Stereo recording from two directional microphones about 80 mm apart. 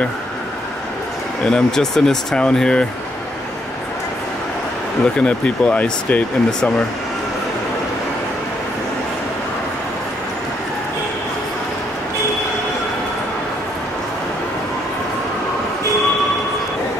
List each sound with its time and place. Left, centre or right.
1.4 s speech: centre
5.0 s speech: centre